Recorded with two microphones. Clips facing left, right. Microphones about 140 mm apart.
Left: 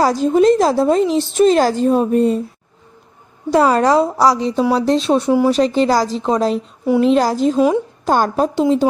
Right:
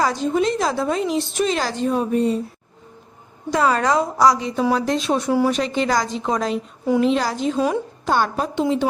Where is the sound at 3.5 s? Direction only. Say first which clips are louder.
Left 6 dB; 35° left (ahead or behind).